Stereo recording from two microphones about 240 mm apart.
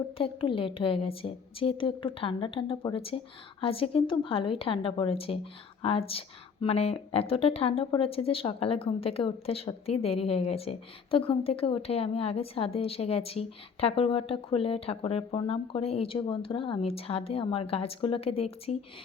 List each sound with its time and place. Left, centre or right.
0.2 s speech: left